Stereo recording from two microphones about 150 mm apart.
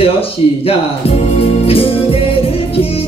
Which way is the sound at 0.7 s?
40° left (ahead or behind).